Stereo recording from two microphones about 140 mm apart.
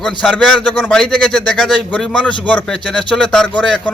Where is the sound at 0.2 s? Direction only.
5° left (ahead or behind).